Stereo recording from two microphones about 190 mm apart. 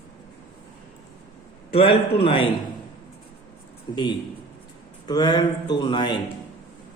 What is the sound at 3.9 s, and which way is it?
Speech, 25° left (ahead or behind).